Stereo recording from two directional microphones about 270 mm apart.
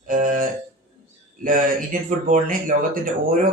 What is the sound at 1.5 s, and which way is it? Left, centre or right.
Speech, right.